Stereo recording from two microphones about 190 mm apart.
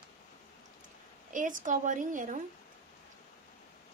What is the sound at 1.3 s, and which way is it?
A woman's voice, 45° right (ahead or behind).